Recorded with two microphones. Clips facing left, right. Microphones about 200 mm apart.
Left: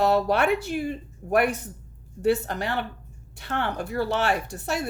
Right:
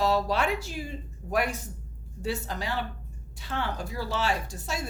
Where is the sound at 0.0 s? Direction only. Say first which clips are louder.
Left 4 dB; 60° left (ahead or behind).